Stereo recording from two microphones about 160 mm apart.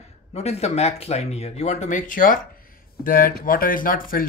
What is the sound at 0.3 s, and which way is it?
Speech, 40° left (ahead or behind).